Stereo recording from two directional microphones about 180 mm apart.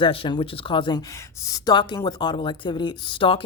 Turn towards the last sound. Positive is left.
turn(degrees=30)  # may be behind; listen again after turning